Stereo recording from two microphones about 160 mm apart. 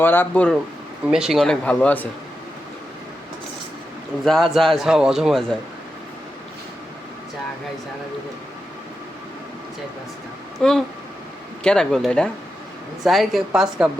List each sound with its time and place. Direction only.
0.0 s speech: 10° left (ahead or behind)
1.1 s a man's voice: 5° right (ahead or behind)
4.2 s a man's voice: centre (ahead or behind)
10.6 s a man's voice: centre (ahead or behind)